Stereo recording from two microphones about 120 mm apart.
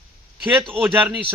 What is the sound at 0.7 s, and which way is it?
Speech, 10° right (ahead or behind).